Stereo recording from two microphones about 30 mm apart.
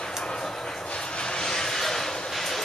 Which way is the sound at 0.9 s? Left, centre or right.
Left.